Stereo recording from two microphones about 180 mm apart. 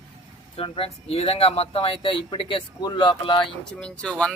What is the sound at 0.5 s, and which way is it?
Speech, 30° left (ahead or behind).